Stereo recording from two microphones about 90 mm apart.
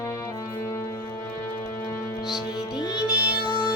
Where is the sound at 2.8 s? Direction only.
45° left (ahead or behind).